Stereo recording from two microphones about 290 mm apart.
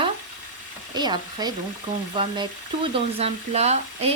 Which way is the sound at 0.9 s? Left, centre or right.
Centre.